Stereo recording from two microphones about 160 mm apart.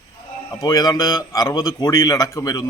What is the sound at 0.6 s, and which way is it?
Speech, 20° left (ahead or behind).